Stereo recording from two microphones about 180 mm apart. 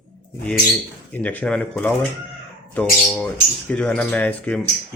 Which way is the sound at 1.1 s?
10° left (ahead or behind).